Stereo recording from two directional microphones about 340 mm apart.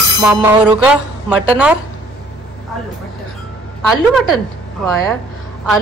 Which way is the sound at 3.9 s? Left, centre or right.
Centre.